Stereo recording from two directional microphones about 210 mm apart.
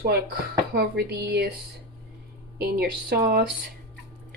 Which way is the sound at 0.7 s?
50° right (ahead or behind).